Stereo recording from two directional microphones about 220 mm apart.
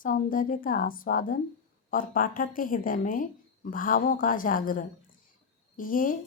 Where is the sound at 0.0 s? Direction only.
40° left (ahead or behind).